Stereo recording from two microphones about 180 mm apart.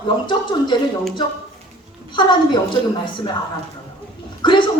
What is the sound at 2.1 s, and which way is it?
Speech, 25° left (ahead or behind).